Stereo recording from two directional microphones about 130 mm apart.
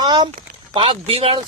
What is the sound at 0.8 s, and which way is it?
Speech, 50° right (ahead or behind).